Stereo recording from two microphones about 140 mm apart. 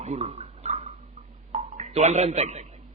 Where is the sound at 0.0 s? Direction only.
55° right (ahead or behind).